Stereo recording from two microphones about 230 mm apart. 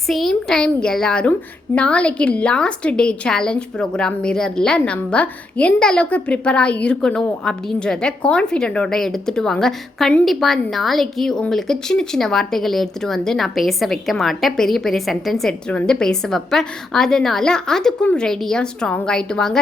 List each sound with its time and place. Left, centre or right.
0.1 s speech: centre